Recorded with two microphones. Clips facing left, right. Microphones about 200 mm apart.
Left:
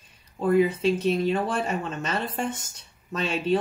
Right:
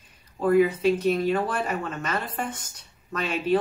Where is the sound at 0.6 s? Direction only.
25° left (ahead or behind).